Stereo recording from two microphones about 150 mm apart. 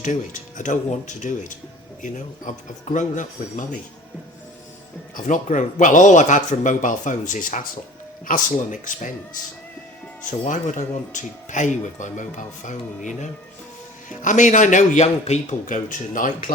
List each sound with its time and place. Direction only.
0.0 s speech: 55° left (ahead or behind)
5.1 s speech: 55° left (ahead or behind)
10.4 s speech: 55° left (ahead or behind)